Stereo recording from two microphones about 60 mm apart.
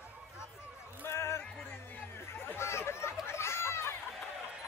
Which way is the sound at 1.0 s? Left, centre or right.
Left.